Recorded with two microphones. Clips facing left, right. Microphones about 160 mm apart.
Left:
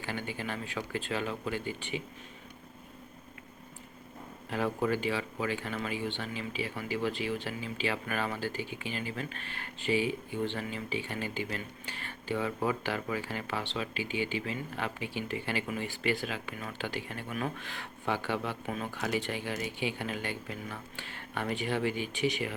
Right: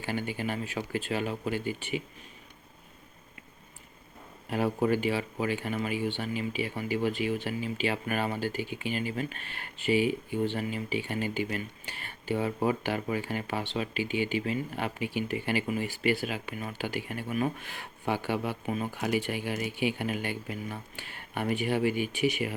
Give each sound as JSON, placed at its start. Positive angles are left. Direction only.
{"t": 0.0, "sound": "speech", "side_deg": -15}
{"t": 4.4, "sound": "speech", "side_deg": -15}